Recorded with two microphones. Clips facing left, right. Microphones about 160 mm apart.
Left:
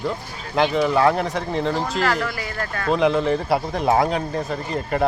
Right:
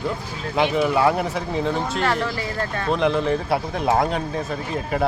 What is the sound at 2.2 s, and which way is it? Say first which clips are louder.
Speech: right 2 dB; 25° right (ahead or behind).